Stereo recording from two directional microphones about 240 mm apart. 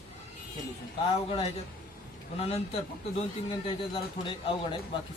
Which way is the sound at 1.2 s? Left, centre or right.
Left.